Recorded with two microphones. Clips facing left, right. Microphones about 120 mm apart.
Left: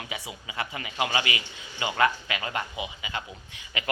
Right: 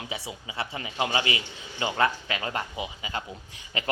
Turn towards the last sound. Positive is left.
turn(degrees=-30)  # may be behind; listen again after turning